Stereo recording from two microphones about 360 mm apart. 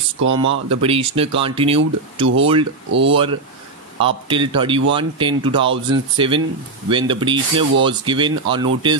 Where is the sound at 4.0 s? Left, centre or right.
Centre.